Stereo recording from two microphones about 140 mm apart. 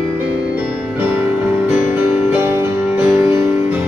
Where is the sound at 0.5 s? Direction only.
15° right (ahead or behind).